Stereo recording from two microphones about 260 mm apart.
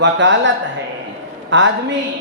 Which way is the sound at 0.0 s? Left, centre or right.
Right.